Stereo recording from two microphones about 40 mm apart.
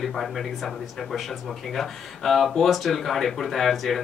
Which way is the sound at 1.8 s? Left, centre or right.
Centre.